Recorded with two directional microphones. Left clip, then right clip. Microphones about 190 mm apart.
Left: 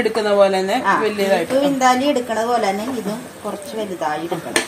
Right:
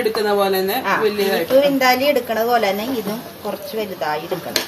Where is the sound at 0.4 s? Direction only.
40° left (ahead or behind).